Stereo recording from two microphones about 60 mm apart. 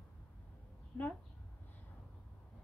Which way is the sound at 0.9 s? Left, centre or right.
Left.